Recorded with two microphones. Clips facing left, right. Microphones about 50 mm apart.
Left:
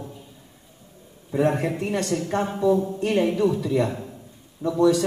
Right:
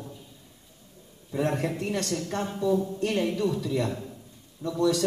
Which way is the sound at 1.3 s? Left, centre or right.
Centre.